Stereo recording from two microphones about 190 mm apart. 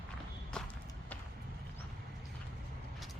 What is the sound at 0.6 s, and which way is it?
Walk, 5° left (ahead or behind).